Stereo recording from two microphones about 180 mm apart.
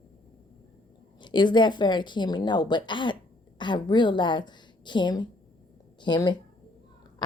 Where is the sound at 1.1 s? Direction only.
25° left (ahead or behind).